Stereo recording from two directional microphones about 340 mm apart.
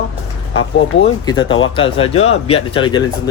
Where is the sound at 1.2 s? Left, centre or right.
Centre.